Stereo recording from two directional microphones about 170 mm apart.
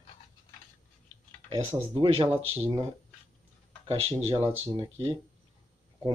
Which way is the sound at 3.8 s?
30° right (ahead or behind).